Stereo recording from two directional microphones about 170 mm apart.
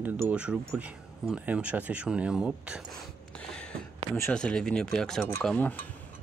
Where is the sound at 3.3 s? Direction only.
5° left (ahead or behind).